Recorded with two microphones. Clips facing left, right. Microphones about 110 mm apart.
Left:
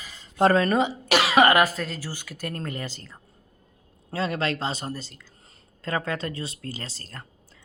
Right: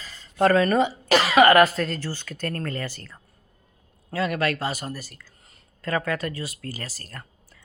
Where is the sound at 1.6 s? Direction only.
5° left (ahead or behind); by 7.2 s 25° left (ahead or behind).